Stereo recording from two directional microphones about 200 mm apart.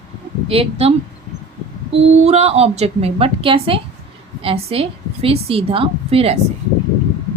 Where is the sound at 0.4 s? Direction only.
30° right (ahead or behind).